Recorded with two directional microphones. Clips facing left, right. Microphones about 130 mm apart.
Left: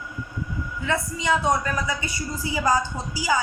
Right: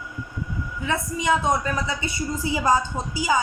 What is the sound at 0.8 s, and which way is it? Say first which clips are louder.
A woman's voice: right 1 dB; 20° right (ahead or behind).